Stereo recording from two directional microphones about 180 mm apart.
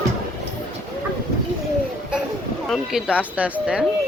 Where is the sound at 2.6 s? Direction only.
Centre (ahead or behind).